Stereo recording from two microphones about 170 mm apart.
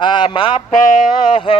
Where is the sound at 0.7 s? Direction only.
50° left (ahead or behind).